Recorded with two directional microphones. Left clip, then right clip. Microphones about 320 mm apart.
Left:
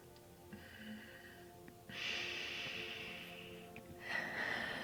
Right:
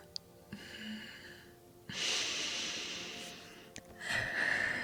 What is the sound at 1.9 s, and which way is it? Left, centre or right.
Snort, right.